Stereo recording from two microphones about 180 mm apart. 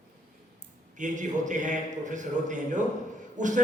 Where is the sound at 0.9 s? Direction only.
45° right (ahead or behind).